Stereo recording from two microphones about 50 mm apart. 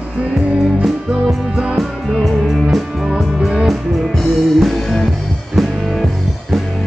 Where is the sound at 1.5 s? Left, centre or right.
Centre.